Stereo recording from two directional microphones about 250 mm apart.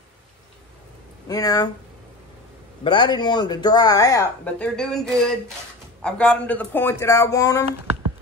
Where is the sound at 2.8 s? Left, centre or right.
Centre.